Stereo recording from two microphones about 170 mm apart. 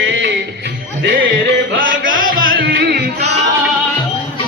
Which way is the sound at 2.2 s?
55° right (ahead or behind).